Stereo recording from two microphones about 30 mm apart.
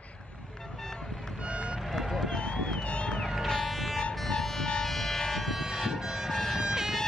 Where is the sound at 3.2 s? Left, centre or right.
Centre.